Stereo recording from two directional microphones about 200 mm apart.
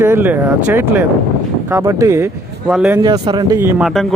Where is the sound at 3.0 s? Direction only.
20° right (ahead or behind).